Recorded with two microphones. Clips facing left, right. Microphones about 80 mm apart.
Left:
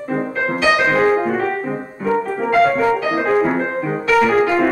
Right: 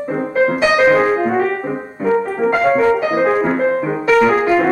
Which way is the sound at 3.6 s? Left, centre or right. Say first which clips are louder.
Right 5 dB; right.